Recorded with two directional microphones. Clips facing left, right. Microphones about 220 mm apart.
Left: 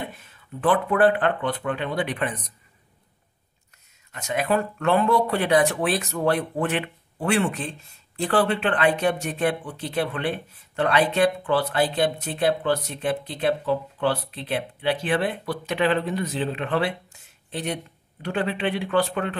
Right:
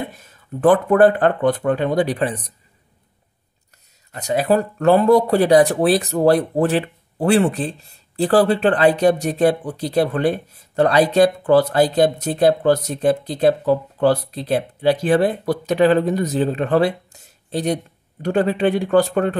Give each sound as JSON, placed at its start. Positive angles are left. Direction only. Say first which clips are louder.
{"t": 0.1, "sound": "speech", "louder": "right 6 dB", "side_deg": -40}
{"t": 4.1, "sound": "speech", "louder": "right 6 dB", "side_deg": -35}